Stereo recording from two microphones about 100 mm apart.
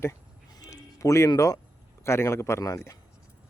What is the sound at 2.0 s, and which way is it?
Speech, 25° left (ahead or behind).